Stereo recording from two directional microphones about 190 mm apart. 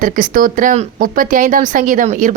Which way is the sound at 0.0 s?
45° right (ahead or behind).